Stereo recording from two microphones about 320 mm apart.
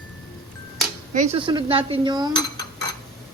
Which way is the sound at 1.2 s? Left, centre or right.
Centre.